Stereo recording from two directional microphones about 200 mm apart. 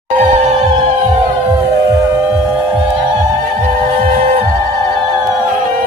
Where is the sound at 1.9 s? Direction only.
15° right (ahead or behind).